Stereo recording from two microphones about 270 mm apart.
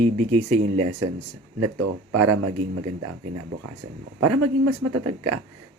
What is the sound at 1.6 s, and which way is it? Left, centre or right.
Speech, right.